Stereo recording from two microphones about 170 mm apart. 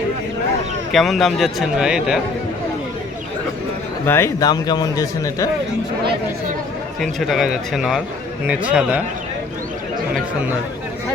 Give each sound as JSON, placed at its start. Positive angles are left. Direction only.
{"t": 0.9, "sound": "speech", "side_deg": 0}
{"t": 4.0, "sound": "a man's voice", "side_deg": 15}
{"t": 7.0, "sound": "a man's voice", "side_deg": 0}